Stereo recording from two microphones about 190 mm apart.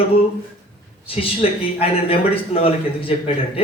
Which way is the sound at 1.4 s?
30° left (ahead or behind).